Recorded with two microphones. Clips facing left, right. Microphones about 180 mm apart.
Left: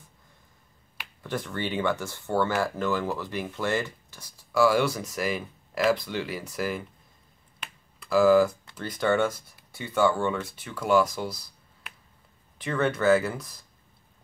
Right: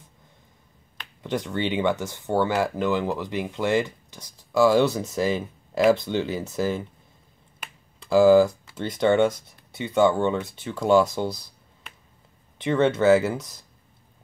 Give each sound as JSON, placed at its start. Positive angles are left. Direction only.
{"t": 1.2, "sound": "speech", "side_deg": -20}
{"t": 8.0, "sound": "speech", "side_deg": -25}
{"t": 12.5, "sound": "speech", "side_deg": -25}